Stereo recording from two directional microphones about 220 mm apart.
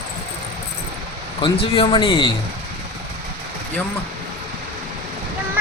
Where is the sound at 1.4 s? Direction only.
25° left (ahead or behind).